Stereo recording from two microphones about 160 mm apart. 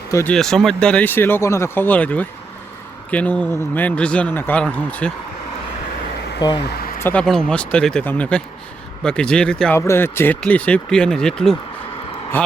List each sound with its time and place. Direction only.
0.1 s speech: 15° left (ahead or behind)
0.3 s a man's voice: 5° left (ahead or behind)
6.7 s a sound: 75° left (ahead or behind)
7.0 s a man's voice: 10° left (ahead or behind)
9.7 s a man's voice: 15° left (ahead or behind)